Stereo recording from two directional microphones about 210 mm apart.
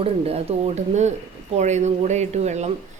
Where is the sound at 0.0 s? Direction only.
30° right (ahead or behind).